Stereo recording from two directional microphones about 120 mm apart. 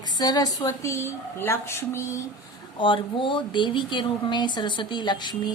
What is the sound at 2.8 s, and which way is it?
Speech, 45° left (ahead or behind).